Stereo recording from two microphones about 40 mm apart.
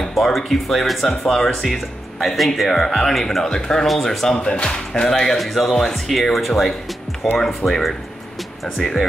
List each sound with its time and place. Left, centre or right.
0.1 s speech: centre
3.8 s speech: centre
4.4 s speech: left
5.4 s speech: centre